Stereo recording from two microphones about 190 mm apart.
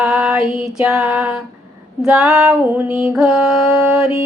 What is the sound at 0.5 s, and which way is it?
Mantra, 5° right (ahead or behind).